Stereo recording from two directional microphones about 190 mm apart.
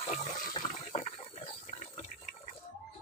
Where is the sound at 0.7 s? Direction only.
35° left (ahead or behind).